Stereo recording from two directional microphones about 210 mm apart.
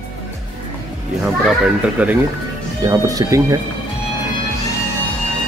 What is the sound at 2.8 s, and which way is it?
Speech, 15° right (ahead or behind).